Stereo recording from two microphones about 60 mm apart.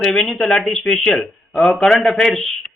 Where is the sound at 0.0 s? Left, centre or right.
Centre.